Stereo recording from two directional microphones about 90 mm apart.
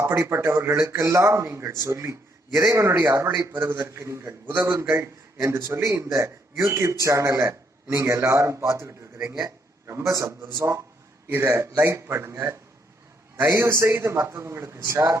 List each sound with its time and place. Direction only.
0.0 s a man's voice: 30° right (ahead or behind)